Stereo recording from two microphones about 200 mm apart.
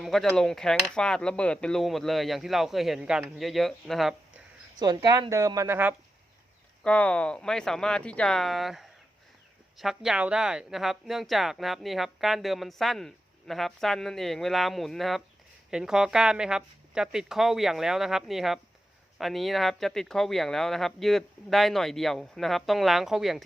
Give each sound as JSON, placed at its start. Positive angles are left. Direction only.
{"t": 0.0, "sound": "speech", "side_deg": 0}
{"t": 4.8, "sound": "speech", "side_deg": -20}
{"t": 6.8, "sound": "speech", "side_deg": 5}